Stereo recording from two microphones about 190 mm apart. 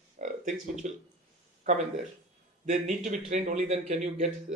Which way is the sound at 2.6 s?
40° right (ahead or behind).